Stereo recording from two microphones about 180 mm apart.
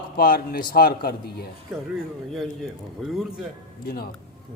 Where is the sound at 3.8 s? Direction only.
60° left (ahead or behind).